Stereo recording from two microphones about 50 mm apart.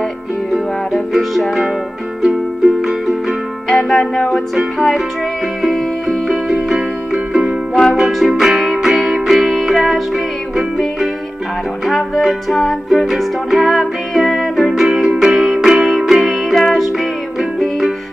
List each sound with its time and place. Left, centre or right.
0.9 s music: centre
4.0 s music: centre
4.6 s music: centre
11.8 s music: centre